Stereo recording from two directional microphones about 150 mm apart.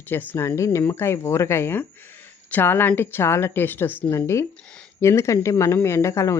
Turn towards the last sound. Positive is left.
turn(degrees=20)  # may be behind; listen again after turning